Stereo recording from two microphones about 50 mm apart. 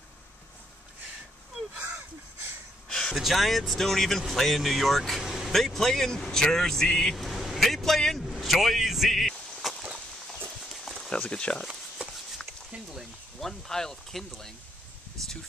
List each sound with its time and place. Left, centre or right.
2.9 s a sound: centre
3.2 s speech: centre
5.2 s vehicle: centre
5.5 s speech: centre
7.3 s a sound: centre
10.7 s clip-clop: centre
11.1 s speech: left
13.4 s speech: centre